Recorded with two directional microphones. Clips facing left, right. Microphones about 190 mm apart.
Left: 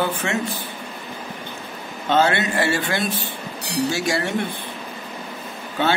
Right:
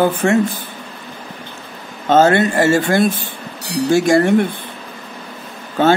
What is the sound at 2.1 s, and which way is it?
Speech, 45° right (ahead or behind).